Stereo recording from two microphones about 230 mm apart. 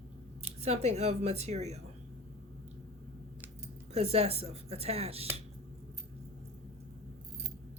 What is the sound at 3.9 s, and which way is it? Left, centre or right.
A woman's voice, right.